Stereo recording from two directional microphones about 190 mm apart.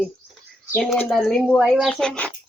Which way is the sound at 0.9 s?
5° left (ahead or behind).